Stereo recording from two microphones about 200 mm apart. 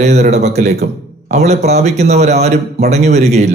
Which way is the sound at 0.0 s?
35° right (ahead or behind).